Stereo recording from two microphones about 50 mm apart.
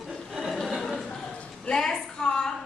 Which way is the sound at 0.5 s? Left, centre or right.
Centre.